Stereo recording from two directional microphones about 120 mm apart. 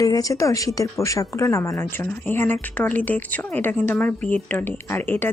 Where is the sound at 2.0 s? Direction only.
15° left (ahead or behind).